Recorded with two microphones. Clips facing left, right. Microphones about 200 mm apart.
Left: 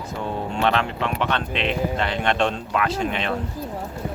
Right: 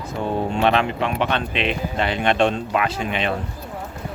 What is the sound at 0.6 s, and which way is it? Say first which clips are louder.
Speech: right 1 dB; 15° right (ahead or behind).